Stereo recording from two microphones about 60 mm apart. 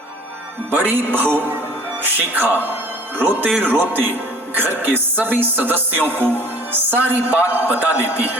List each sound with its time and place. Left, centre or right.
0.7 s speech: right